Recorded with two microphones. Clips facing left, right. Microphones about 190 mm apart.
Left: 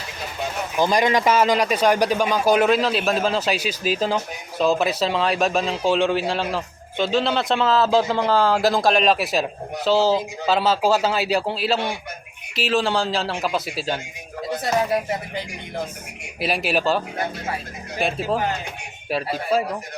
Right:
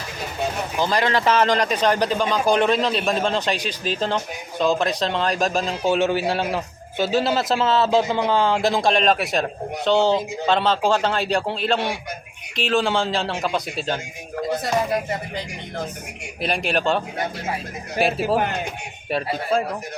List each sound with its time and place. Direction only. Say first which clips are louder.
0.8 s a man's voice: left 3 dB; 15° left (ahead or behind)
16.4 s a man's voice: left 1 dB; 5° left (ahead or behind)
18.3 s speech: right 2 dB; 60° right (ahead or behind)
19.1 s a man's voice: even; centre (ahead or behind)